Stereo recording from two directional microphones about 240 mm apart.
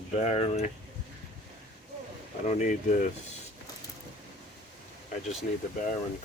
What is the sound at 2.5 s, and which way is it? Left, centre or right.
Speech, left.